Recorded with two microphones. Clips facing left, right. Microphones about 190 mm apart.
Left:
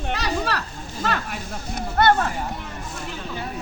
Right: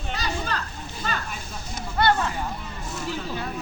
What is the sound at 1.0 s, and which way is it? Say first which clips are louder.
Speech: left 5 dB; 70° left (ahead or behind).